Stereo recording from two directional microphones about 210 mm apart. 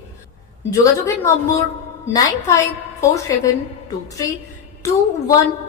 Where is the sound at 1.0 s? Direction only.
15° left (ahead or behind).